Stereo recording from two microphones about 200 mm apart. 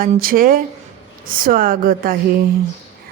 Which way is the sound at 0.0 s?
45° right (ahead or behind).